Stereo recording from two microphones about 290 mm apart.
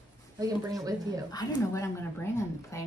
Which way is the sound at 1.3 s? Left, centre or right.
Centre.